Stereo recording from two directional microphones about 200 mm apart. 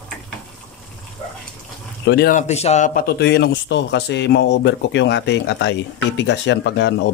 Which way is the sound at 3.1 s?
55° left (ahead or behind).